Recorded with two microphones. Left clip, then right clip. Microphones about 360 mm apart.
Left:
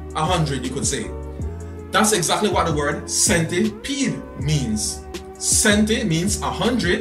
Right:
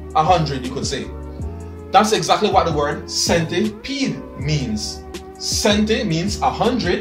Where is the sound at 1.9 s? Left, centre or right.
Centre.